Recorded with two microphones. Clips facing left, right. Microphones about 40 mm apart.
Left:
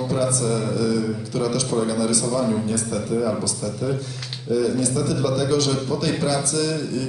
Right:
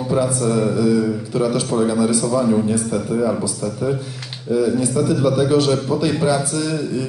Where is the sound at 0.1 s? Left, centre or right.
Centre.